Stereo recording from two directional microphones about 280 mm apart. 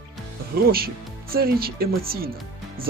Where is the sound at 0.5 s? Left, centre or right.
Right.